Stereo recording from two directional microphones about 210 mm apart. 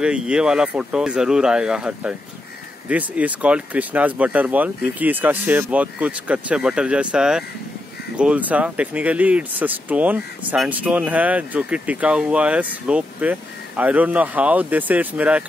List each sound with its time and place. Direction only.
0.0 s speech: 5° right (ahead or behind)